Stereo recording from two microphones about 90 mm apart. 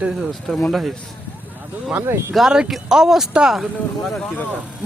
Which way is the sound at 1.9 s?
25° right (ahead or behind).